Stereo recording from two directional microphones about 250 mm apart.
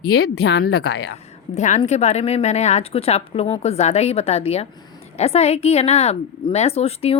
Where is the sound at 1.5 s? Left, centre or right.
Left.